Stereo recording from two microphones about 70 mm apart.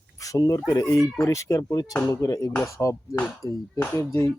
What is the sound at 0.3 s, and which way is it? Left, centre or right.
Speech, left.